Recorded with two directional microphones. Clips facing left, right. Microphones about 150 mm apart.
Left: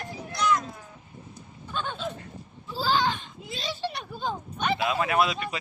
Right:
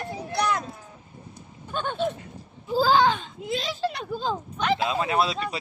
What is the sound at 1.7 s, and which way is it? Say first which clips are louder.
Speech: right 5 dB; 50° right (ahead or behind).